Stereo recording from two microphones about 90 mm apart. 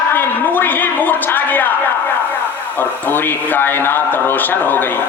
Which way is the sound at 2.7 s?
20° left (ahead or behind).